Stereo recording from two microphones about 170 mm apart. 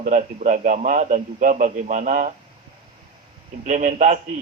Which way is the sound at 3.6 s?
45° right (ahead or behind).